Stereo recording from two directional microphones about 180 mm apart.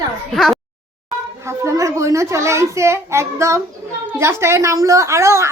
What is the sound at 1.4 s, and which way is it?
A child's voice, 15° right (ahead or behind).